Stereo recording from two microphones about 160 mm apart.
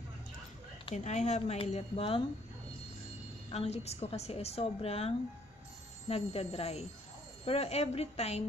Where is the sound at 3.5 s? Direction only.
40° left (ahead or behind).